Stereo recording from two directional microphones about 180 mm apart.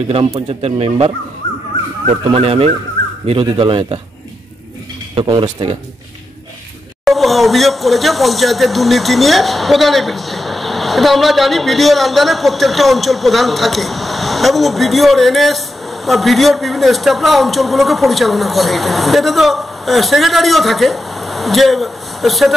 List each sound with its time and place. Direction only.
0.1 s speech: 30° right (ahead or behind)
5.1 s speech: 30° right (ahead or behind)
7.1 s speech: centre (ahead or behind)